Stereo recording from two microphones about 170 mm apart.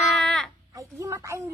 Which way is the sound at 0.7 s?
15° right (ahead or behind).